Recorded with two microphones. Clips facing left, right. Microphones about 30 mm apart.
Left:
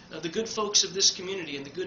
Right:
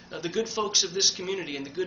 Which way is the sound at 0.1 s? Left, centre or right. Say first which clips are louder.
Right 2 dB; centre.